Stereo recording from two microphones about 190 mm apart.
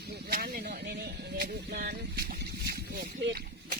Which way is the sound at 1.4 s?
55° right (ahead or behind).